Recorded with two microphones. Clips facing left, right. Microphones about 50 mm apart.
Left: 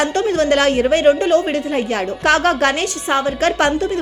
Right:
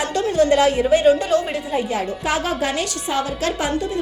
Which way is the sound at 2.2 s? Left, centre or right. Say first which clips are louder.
Left 10 dB; left.